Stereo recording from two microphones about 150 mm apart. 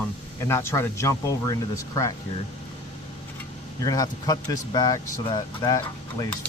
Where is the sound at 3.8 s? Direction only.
25° left (ahead or behind).